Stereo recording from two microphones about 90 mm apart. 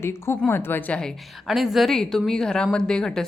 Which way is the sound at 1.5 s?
Centre (ahead or behind).